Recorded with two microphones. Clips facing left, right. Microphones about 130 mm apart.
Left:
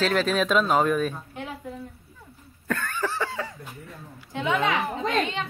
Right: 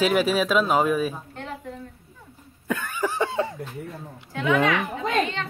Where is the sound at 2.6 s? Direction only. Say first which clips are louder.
Right 2 dB; 10° right (ahead or behind).